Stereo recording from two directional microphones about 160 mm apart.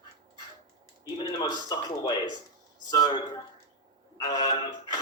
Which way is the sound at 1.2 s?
25° left (ahead or behind).